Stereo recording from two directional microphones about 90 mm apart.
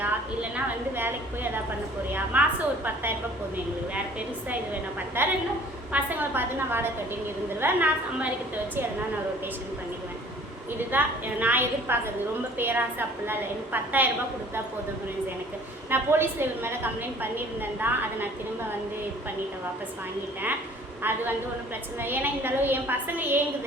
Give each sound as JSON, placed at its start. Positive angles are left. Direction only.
{"t": 0.5, "sound": "a sound", "side_deg": -25}
{"t": 2.3, "sound": "a woman's voice", "side_deg": -20}
{"t": 5.2, "sound": "a woman's voice", "side_deg": -25}
{"t": 10.9, "sound": "a woman's voice", "side_deg": -20}
{"t": 15.9, "sound": "a woman's voice", "side_deg": -25}
{"t": 22.0, "sound": "a woman's voice", "side_deg": -20}